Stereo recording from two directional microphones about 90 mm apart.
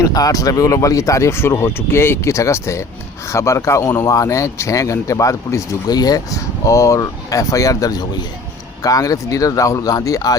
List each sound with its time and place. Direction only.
0.0 s speech: 45° left (ahead or behind)
5.9 s speech: 45° left (ahead or behind)